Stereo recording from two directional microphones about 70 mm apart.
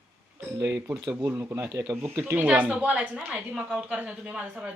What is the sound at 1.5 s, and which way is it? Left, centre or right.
Speech, right.